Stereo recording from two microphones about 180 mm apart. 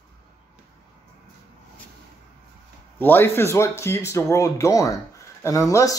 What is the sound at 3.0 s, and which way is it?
Speech, 10° left (ahead or behind).